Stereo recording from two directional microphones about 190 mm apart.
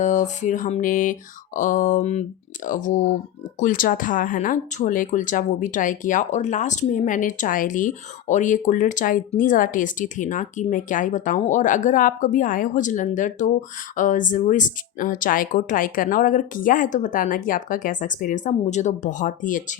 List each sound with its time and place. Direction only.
0.0 s speech: 40° left (ahead or behind)